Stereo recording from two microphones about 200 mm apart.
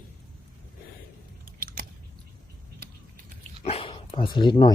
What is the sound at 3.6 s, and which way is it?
Dog, 30° left (ahead or behind).